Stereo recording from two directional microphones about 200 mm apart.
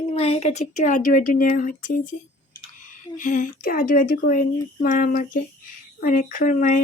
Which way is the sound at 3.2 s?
40° left (ahead or behind).